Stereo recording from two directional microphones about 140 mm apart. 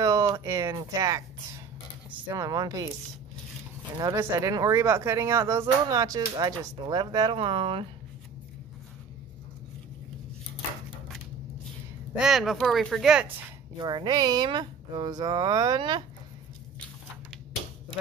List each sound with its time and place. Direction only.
0.0 s a sound: 25° right (ahead or behind)
2.0 s a sound: 10° right (ahead or behind)
2.3 s speech: 25° right (ahead or behind)
4.0 s speech: 20° right (ahead or behind)
7.3 s speech: 40° right (ahead or behind)
12.2 s speech: centre (ahead or behind)
13.7 s speech: 30° right (ahead or behind)